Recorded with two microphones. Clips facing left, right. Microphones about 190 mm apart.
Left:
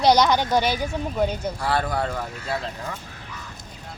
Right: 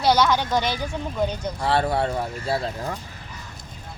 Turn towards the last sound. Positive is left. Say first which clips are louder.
# right 3 dB
turn(degrees=-40)  # may be behind; listen again after turning